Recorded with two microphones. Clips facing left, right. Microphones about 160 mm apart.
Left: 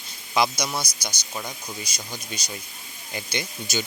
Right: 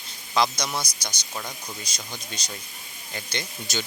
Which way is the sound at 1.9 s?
5° left (ahead or behind).